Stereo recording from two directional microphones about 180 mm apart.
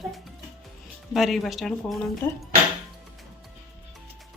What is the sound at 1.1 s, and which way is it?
Speech, centre (ahead or behind).